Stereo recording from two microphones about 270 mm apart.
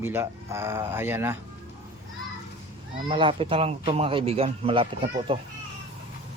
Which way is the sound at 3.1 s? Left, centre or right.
Centre.